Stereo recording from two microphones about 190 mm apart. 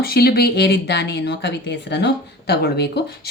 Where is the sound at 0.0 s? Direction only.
55° left (ahead or behind).